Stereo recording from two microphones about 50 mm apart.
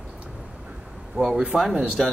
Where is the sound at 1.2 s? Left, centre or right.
Right.